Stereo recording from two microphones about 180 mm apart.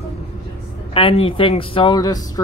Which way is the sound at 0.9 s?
30° left (ahead or behind).